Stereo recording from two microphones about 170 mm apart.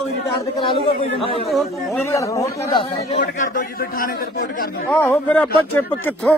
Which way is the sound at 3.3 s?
50° left (ahead or behind).